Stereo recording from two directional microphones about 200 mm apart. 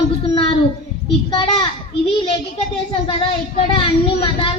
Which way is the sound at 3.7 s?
25° left (ahead or behind).